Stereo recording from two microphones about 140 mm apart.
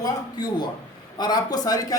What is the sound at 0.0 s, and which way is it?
A man's voice, 30° left (ahead or behind).